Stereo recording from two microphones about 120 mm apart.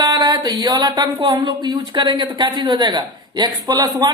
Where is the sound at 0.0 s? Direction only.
35° right (ahead or behind).